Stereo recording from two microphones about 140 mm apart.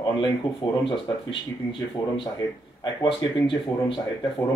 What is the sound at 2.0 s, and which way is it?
Speech, 25° left (ahead or behind).